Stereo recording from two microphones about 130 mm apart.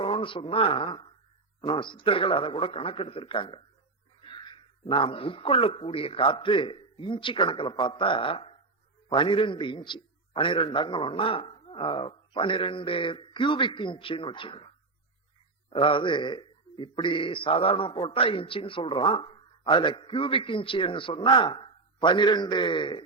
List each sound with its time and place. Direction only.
0.0 s a man's voice: 45° left (ahead or behind)
15.7 s a man's voice: 40° left (ahead or behind)